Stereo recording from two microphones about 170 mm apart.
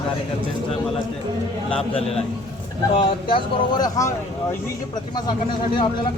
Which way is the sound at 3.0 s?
30° left (ahead or behind).